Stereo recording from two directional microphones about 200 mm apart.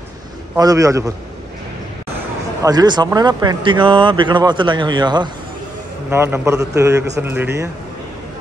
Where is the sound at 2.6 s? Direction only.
20° right (ahead or behind).